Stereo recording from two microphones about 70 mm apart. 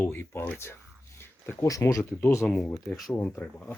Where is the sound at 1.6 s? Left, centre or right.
Left.